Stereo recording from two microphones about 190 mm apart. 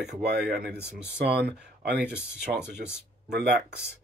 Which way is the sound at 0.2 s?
60° right (ahead or behind).